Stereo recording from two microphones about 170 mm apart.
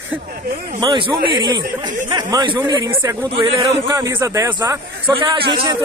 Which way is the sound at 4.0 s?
15° right (ahead or behind).